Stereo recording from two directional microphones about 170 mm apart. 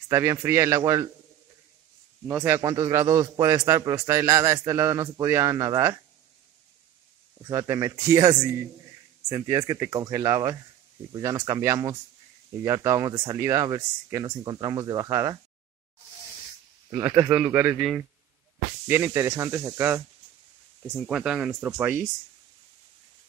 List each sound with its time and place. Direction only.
0.1 s a man's voice: 15° right (ahead or behind)
2.2 s a man's voice: 10° right (ahead or behind)
7.4 s speech: 20° right (ahead or behind)
16.9 s a man's voice: 20° right (ahead or behind)
18.9 s a man's voice: 15° right (ahead or behind)
20.9 s speech: 5° right (ahead or behind)